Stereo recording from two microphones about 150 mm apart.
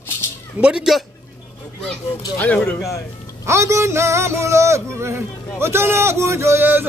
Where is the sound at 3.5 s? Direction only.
20° right (ahead or behind).